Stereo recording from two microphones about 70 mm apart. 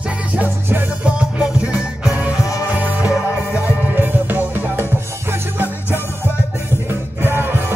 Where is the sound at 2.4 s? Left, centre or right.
Left.